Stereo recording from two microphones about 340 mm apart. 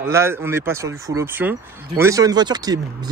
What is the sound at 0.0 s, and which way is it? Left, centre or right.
Speech, centre.